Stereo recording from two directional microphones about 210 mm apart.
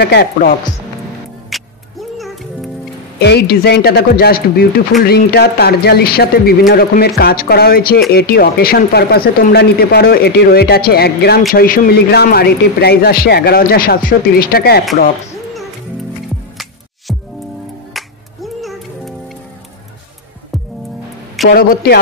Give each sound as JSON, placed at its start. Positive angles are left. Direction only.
{"t": 0.0, "sound": "speech", "side_deg": 50}
{"t": 1.5, "sound": "music", "side_deg": 0}
{"t": 3.2, "sound": "speech", "side_deg": 50}
{"t": 17.1, "sound": "music", "side_deg": 0}
{"t": 20.5, "sound": "music", "side_deg": 0}
{"t": 21.5, "sound": "speech", "side_deg": 45}